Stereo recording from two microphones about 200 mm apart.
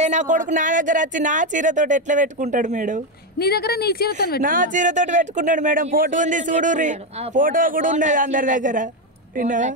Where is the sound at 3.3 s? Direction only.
50° left (ahead or behind).